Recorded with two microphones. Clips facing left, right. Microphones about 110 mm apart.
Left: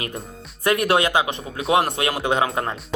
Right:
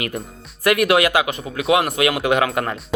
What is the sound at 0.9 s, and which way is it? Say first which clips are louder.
Speech: right 2 dB; 30° left (ahead or behind).